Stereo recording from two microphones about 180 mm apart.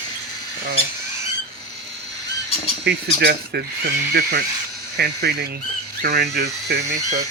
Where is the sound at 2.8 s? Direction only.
60° right (ahead or behind).